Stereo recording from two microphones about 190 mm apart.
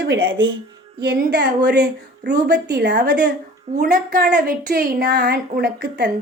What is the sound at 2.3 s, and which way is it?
A woman's voice, 45° right (ahead or behind).